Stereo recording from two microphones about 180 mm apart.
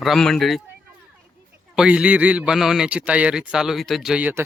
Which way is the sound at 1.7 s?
5° right (ahead or behind).